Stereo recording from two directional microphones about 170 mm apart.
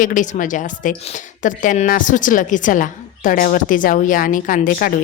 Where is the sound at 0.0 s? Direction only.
50° left (ahead or behind).